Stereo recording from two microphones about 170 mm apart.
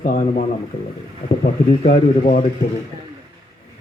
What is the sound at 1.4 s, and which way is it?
Speech, 35° left (ahead or behind).